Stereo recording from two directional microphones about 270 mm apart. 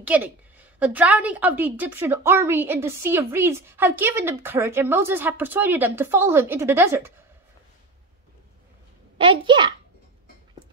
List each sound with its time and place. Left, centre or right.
0.0 s a woman's voice: centre
9.2 s a woman's voice: centre